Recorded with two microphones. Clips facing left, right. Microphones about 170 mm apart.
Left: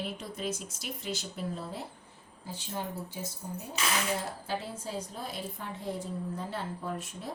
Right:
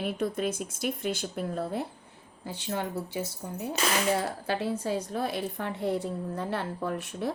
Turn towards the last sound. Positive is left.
turn(degrees=-70)  # may be behind; listen again after turning